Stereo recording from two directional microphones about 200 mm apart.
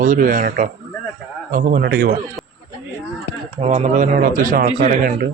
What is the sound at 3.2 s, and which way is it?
Speech, 35° right (ahead or behind).